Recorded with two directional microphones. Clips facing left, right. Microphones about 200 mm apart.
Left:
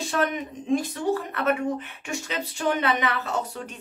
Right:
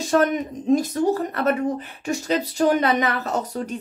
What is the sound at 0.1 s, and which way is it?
Speech, 45° right (ahead or behind).